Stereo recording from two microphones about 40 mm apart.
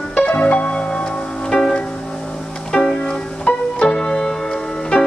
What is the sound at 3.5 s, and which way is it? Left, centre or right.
Music, left.